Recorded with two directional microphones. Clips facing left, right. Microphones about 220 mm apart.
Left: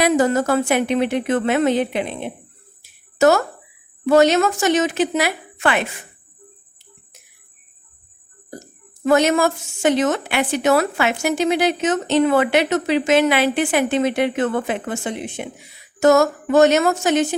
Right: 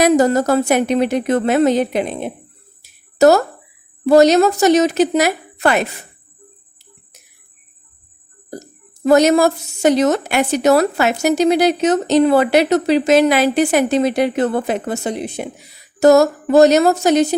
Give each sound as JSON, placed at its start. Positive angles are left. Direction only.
{"t": 0.0, "sound": "a woman's voice", "side_deg": -40}
{"t": 2.8, "sound": "a sound", "side_deg": -35}
{"t": 4.0, "sound": "a woman's voice", "side_deg": -40}
{"t": 9.0, "sound": "a woman's voice", "side_deg": -40}